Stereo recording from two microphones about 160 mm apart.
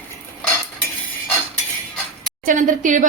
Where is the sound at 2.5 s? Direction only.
55° right (ahead or behind).